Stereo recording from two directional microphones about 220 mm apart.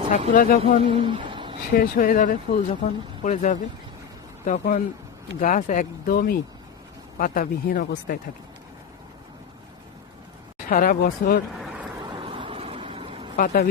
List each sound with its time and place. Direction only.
0.3 s speech: 40° left (ahead or behind)
0.6 s speech: 25° right (ahead or behind)
1.7 s speech: 40° left (ahead or behind)
10.7 s speech: 40° left (ahead or behind)
11.5 s vehicle: 5° right (ahead or behind)
12.0 s vehicle: 25° right (ahead or behind)
13.3 s speech: 40° left (ahead or behind)